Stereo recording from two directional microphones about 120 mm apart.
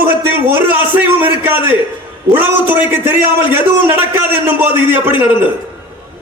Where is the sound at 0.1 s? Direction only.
15° right (ahead or behind).